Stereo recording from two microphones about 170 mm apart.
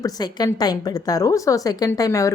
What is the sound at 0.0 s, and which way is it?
A woman's voice, 20° left (ahead or behind).